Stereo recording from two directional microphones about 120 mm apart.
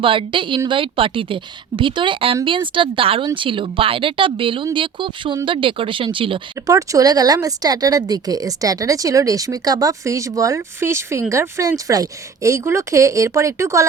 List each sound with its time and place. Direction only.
0.0 s a woman's voice: 45° right (ahead or behind)
6.7 s speech: 30° right (ahead or behind)